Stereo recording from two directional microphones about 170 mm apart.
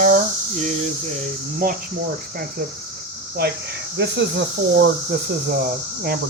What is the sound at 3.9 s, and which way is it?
Speech, 90° right.